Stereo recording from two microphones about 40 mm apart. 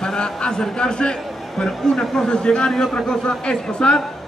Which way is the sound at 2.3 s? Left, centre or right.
Left.